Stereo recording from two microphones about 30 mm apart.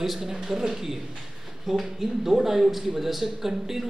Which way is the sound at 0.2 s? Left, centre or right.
Centre.